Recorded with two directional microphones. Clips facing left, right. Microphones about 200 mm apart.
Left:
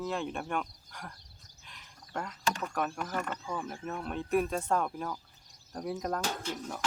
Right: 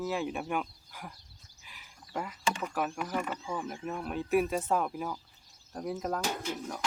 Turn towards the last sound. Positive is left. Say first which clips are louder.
# right 1 dB
turn(degrees=-10)  # may be behind; listen again after turning